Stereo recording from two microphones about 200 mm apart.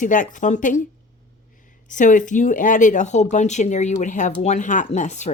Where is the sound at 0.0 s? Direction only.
40° left (ahead or behind).